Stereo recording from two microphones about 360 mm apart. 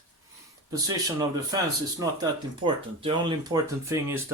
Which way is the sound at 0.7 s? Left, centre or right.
Centre.